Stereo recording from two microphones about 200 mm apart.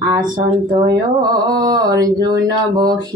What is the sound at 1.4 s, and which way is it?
Mantra, 20° right (ahead or behind).